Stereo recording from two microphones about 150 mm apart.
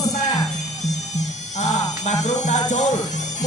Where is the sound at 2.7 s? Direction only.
50° left (ahead or behind).